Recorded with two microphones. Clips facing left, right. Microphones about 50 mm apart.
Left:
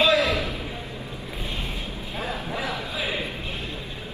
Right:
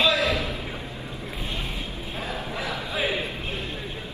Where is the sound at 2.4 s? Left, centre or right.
Left.